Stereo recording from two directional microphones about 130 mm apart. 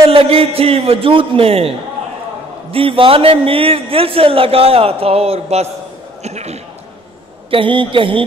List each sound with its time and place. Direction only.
0.0 s a man's voice: 45° right (ahead or behind)
7.5 s speech: 40° right (ahead or behind)